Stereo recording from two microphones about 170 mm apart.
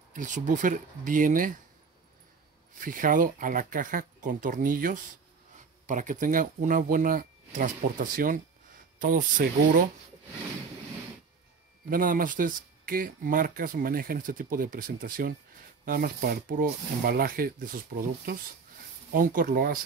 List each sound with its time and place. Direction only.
0.1 s speech: 50° right (ahead or behind)
2.8 s speech: 55° right (ahead or behind)
11.9 s speech: 55° right (ahead or behind)
19.1 s speech: 55° right (ahead or behind)